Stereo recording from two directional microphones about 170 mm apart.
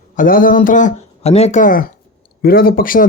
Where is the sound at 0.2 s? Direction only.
55° left (ahead or behind).